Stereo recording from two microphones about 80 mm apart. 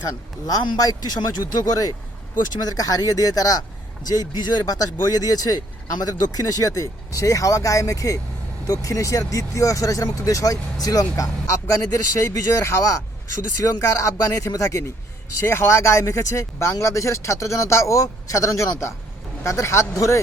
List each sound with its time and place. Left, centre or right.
0.4 s a man's voice: left